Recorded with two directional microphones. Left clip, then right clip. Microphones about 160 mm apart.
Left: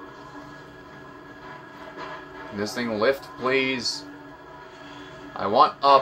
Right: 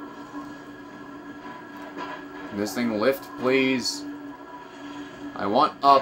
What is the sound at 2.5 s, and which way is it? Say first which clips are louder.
Speech: right 1 dB; 90° right.